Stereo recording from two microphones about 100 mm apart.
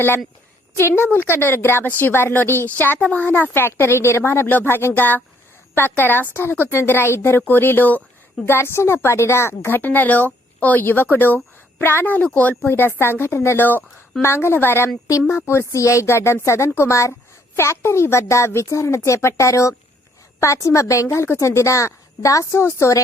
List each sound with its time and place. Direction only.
0.8 s a woman's voice: 25° left (ahead or behind)